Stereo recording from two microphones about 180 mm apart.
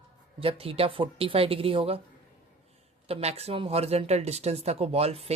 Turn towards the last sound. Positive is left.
turn(degrees=-35)  # may be behind; listen again after turning